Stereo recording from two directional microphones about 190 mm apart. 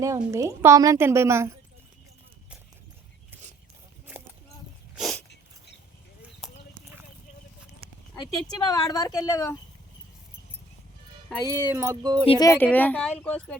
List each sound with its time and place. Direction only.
0.0 s a woman's voice: 15° right (ahead or behind)
4.9 s dog: centre (ahead or behind)
8.5 s a woman's voice: 20° left (ahead or behind)
11.4 s a woman's voice: 15° right (ahead or behind)
12.3 s a woman's voice: 20° left (ahead or behind)
12.5 s a woman's voice: 10° left (ahead or behind)